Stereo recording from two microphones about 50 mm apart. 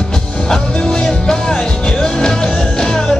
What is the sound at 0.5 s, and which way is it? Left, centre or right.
Music, centre.